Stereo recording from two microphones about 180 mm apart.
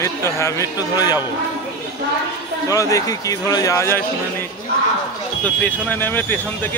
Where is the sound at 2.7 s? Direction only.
20° left (ahead or behind).